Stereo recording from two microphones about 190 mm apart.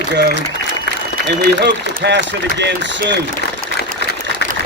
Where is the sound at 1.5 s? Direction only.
65° right (ahead or behind).